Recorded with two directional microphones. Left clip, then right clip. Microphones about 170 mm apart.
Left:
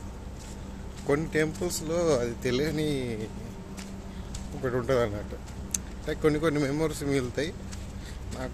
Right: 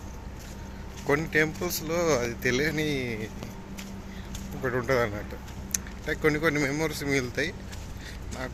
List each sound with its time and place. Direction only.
1.0 s speech: 10° left (ahead or behind)
4.6 s speech: 10° left (ahead or behind)